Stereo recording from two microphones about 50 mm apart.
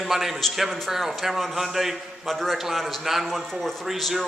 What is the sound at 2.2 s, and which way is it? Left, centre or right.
A man's voice, centre.